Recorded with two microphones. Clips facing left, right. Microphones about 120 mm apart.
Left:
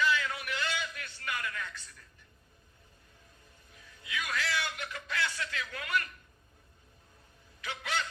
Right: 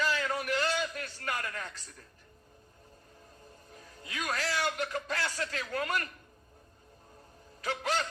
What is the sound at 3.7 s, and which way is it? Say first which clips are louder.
A man's voice: left 1 dB; 40° right (ahead or behind).